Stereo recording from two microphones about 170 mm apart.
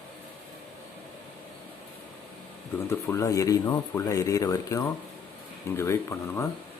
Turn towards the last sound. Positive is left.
turn(degrees=15)  # may be behind; listen again after turning